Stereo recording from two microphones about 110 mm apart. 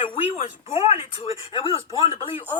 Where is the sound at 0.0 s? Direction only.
60° left (ahead or behind).